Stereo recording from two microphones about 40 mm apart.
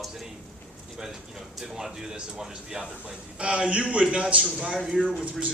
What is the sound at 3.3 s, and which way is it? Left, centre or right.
Speech, right.